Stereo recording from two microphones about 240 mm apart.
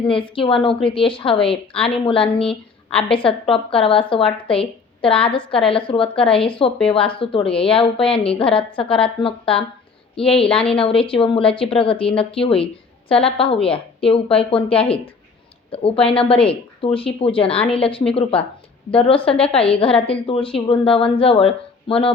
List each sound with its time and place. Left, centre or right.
0.0 s a woman's voice: left